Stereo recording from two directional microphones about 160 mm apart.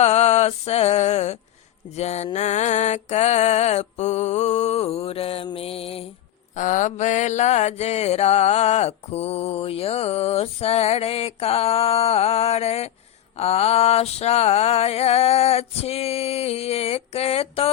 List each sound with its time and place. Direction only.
0.0 s music: 40° left (ahead or behind)
6.6 s mantra: 50° left (ahead or behind)